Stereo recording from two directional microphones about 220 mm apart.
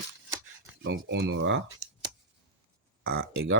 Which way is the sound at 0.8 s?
50° right (ahead or behind).